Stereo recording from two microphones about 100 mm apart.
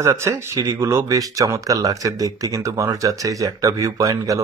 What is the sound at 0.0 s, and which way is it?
Speech, 30° right (ahead or behind).